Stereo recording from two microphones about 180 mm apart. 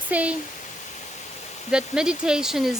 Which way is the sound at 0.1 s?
5° right (ahead or behind).